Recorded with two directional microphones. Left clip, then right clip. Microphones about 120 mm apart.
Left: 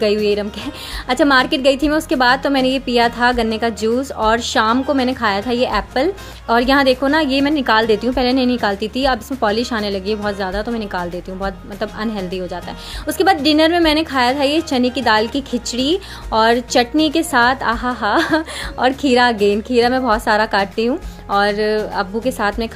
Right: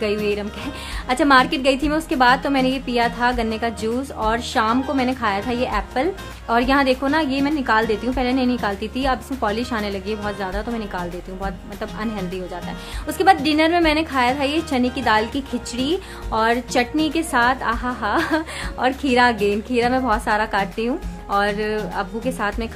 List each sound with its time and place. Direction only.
0.0 s a woman's voice: 35° left (ahead or behind)